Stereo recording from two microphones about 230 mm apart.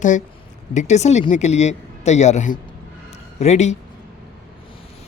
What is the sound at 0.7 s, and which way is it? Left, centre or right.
Speech, left.